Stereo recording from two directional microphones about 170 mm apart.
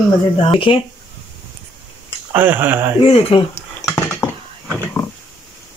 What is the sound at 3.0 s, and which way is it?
Speech, 30° left (ahead or behind).